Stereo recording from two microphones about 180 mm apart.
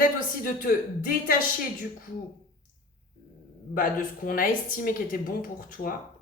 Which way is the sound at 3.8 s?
50° left (ahead or behind).